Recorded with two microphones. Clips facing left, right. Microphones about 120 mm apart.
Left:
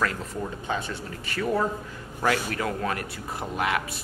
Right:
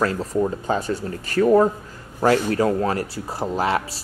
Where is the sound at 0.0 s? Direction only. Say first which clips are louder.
Right 8 dB; 35° right (ahead or behind).